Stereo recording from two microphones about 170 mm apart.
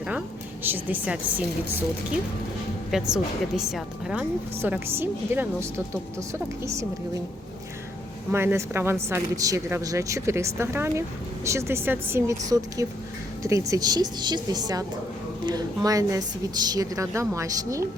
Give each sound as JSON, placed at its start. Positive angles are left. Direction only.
{"t": 0.6, "sound": "speech", "side_deg": -10}
{"t": 2.9, "sound": "speech", "side_deg": -5}
{"t": 8.3, "sound": "a woman's voice", "side_deg": -15}